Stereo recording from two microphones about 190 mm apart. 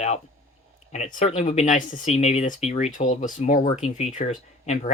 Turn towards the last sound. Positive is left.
turn(degrees=35)  # may be behind; listen again after turning